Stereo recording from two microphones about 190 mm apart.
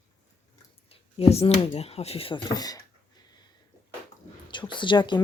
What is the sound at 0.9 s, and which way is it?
Speech, 35° left (ahead or behind).